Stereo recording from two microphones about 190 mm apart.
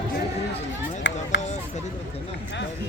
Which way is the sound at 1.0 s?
75° left (ahead or behind).